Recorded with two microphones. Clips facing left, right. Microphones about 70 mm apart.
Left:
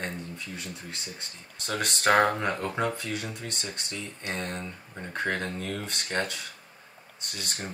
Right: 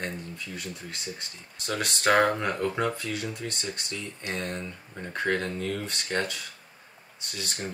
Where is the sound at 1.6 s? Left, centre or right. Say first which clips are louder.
Even; centre.